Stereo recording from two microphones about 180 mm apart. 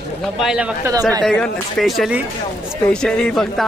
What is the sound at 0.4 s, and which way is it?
A man's voice, 5° right (ahead or behind).